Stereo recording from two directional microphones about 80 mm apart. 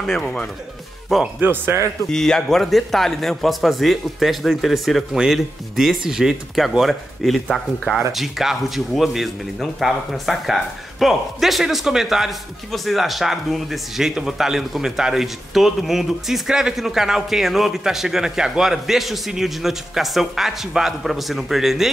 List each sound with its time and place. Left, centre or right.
0.2 s speech: centre
1.4 s speech: right
2.0 s speech: centre